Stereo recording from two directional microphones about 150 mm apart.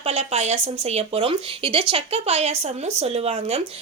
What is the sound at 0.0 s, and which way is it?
Speech, 40° right (ahead or behind).